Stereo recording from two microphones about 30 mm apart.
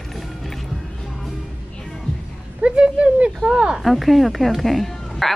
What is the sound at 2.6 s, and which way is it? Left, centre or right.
Speech, right.